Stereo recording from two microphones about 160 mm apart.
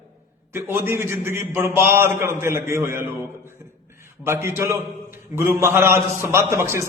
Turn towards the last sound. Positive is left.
turn(degrees=-15)  # may be behind; listen again after turning